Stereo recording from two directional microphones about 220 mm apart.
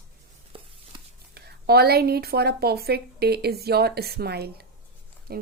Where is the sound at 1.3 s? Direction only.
45° right (ahead or behind).